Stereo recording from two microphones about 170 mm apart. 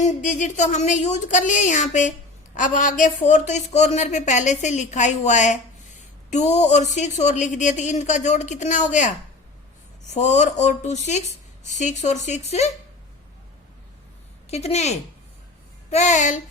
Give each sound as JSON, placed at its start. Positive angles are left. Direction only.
{"t": 0.0, "sound": "a woman's voice", "side_deg": 45}
{"t": 10.2, "sound": "a woman's voice", "side_deg": 45}
{"t": 14.5, "sound": "a woman's voice", "side_deg": 40}